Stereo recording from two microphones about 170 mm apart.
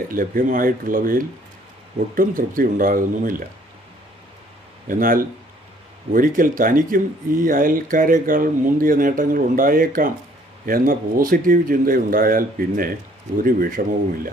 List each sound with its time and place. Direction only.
0.1 s speech: 55° right (ahead or behind)
4.9 s speech: 55° right (ahead or behind)